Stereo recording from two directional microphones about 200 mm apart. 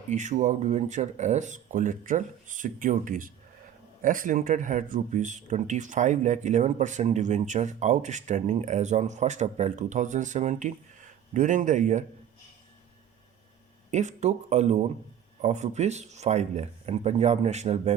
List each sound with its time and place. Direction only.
0.1 s speech: 35° right (ahead or behind)
13.9 s speech: 35° right (ahead or behind)